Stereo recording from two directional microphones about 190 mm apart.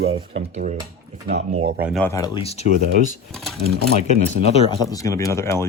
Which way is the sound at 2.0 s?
15° left (ahead or behind).